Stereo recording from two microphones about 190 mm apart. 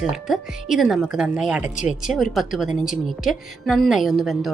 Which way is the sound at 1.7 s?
40° left (ahead or behind).